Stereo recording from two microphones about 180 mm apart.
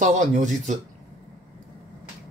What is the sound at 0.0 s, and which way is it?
Speech, 40° right (ahead or behind).